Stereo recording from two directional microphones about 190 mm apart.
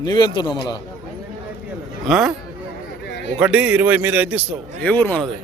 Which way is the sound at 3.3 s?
5° right (ahead or behind).